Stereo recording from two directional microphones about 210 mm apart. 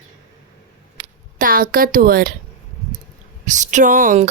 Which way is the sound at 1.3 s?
40° right (ahead or behind).